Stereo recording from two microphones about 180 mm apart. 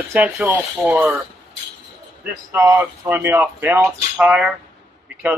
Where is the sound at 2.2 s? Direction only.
15° right (ahead or behind).